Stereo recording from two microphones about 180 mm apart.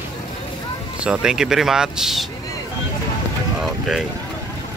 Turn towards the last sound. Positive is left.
turn(degrees=0)  # may be behind; listen again after turning